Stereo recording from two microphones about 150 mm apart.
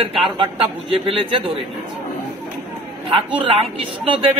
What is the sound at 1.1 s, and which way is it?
Speech, 35° right (ahead or behind).